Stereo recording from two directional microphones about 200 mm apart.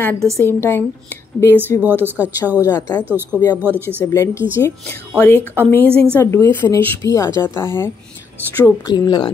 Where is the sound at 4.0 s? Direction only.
15° left (ahead or behind).